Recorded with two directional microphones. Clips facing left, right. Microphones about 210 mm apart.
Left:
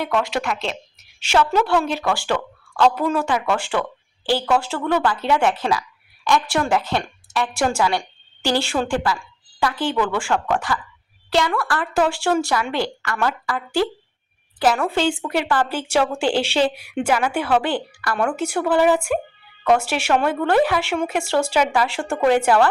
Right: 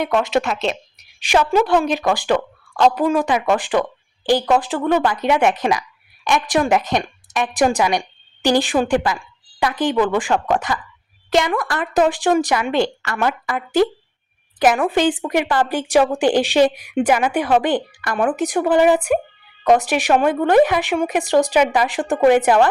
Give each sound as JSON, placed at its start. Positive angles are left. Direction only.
{"t": 0.0, "sound": "a woman's voice", "side_deg": -20}